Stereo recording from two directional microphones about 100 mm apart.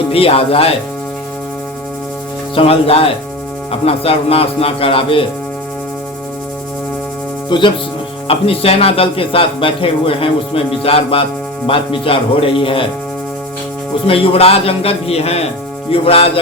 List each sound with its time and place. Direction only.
0.1 s speech: 70° left (ahead or behind)
2.6 s speech: 75° left (ahead or behind)
7.5 s speech: 50° left (ahead or behind)
8.3 s a man's voice: 80° left
14.1 s speech: 75° left (ahead or behind)
15.9 s speech: 70° left (ahead or behind)